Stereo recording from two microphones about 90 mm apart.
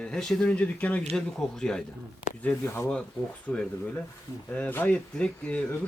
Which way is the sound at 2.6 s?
25° left (ahead or behind).